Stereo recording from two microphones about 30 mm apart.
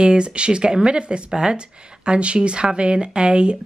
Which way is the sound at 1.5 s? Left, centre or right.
Right.